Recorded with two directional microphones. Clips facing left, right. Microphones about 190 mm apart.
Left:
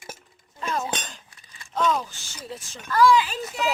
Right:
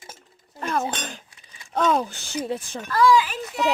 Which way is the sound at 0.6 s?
60° right (ahead or behind).